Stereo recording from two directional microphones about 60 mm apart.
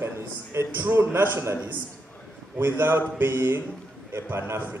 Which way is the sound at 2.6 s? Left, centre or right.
Right.